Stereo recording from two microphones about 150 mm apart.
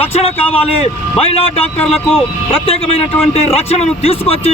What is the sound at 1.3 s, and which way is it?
Speech, 40° left (ahead or behind).